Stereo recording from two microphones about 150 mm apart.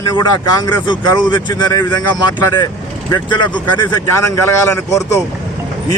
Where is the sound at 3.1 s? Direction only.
30° left (ahead or behind).